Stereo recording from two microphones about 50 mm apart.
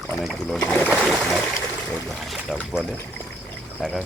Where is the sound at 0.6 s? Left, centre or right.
Left.